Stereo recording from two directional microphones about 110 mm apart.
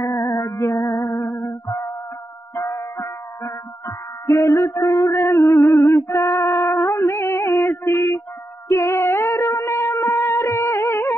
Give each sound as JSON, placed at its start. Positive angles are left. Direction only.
{"t": 0.0, "sound": "music", "side_deg": 30}
{"t": 7.0, "sound": "a sound", "side_deg": 30}
{"t": 7.8, "sound": "music", "side_deg": 25}